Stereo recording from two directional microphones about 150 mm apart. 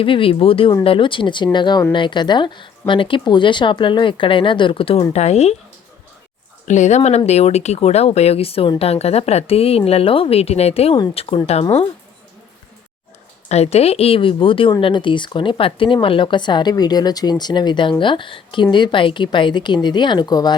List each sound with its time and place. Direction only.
0.0 s a woman's voice: 35° left (ahead or behind)
6.7 s a woman's voice: 50° left (ahead or behind)
13.5 s speech: 45° left (ahead or behind); by 20.5 s 25° left (ahead or behind)